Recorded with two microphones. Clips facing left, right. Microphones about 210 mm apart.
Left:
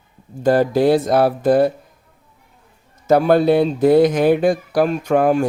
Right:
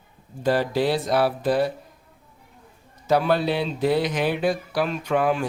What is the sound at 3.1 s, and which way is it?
Speech, 50° left (ahead or behind).